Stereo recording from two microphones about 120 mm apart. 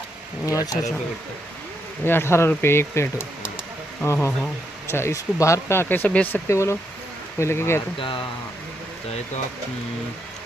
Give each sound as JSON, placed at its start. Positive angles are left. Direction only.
{"t": 0.4, "sound": "speech", "side_deg": 30}
{"t": 2.0, "sound": "speech", "side_deg": 20}
{"t": 7.9, "sound": "speech", "side_deg": 45}